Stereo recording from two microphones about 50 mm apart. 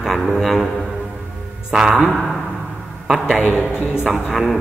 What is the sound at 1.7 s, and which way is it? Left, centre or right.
Speech, centre.